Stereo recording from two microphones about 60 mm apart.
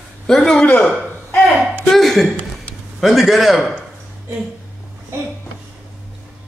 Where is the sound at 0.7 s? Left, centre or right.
Left.